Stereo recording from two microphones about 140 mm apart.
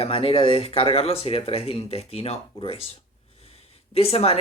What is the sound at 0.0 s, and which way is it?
Speech, 45° left (ahead or behind).